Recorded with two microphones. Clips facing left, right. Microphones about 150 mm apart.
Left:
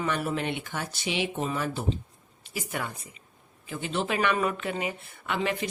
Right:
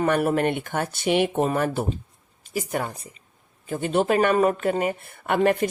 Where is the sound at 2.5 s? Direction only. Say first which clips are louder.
Right 7 dB; 40° right (ahead or behind).